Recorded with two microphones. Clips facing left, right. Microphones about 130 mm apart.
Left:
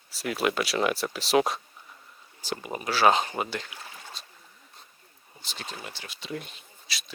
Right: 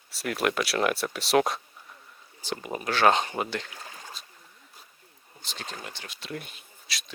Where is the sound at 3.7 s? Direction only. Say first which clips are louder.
Right 1 dB; 35° right (ahead or behind).